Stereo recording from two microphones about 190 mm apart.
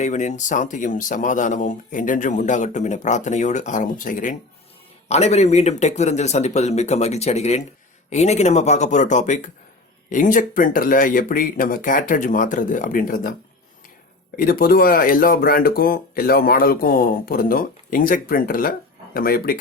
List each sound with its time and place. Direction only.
0.0 s speech: 40° left (ahead or behind)
14.3 s speech: 50° left (ahead or behind)